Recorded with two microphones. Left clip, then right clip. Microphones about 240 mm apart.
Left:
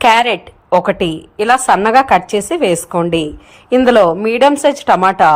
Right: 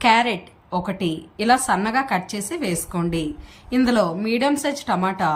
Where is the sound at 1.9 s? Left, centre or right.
Left.